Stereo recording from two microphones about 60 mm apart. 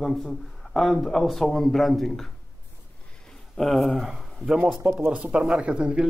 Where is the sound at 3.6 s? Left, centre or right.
Centre.